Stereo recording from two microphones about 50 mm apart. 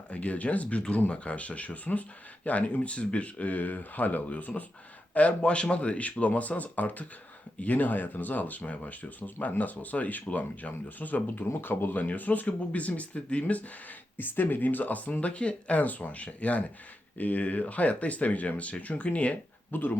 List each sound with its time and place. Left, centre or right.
0.1 s speech: left
14.2 s speech: left
19.7 s speech: left